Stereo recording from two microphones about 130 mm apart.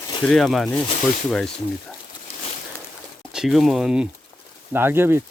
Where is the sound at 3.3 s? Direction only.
5° right (ahead or behind).